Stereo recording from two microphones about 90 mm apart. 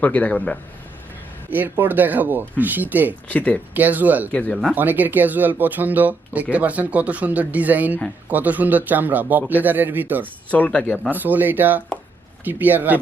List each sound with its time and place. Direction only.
0.0 s a man's voice: 15° left (ahead or behind)
1.5 s speech: 20° right (ahead or behind)
3.2 s a man's voice: 15° left (ahead or behind)
3.8 s speech: 20° right (ahead or behind)
4.3 s a man's voice: 15° left (ahead or behind)
4.7 s speech: 20° right (ahead or behind)
10.5 s a man's voice: 15° left (ahead or behind)
11.1 s speech: 20° right (ahead or behind)